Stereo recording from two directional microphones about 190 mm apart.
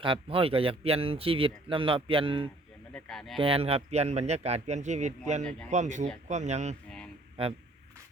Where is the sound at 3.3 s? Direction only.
30° right (ahead or behind).